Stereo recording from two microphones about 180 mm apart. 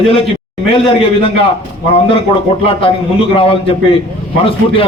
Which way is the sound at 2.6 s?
30° left (ahead or behind).